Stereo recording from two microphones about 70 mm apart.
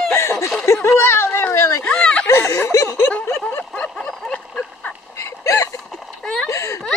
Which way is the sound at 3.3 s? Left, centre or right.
Left.